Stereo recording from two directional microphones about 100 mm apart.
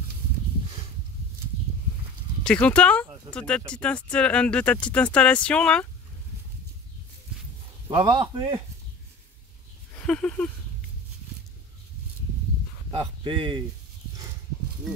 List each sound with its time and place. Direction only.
2.4 s speech: 10° left (ahead or behind)
7.9 s a man's voice: 50° right (ahead or behind)
9.9 s speech: 10° left (ahead or behind)
12.9 s a man's voice: 55° right (ahead or behind)